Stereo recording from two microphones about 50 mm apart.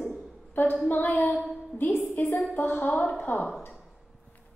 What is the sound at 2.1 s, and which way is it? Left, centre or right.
Speech, left.